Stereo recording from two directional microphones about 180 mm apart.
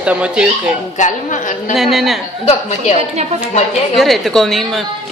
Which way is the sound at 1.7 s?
Centre (ahead or behind).